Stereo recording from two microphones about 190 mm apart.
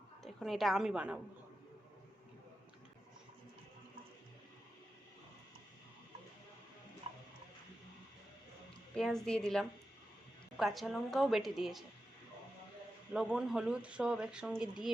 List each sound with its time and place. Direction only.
0.2 s a woman's voice: centre (ahead or behind)
7.1 s tick-tock: 30° right (ahead or behind)
9.0 s speech: centre (ahead or behind)
13.1 s speech: centre (ahead or behind)